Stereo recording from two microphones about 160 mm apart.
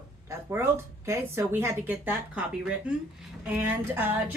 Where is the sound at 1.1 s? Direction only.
15° right (ahead or behind).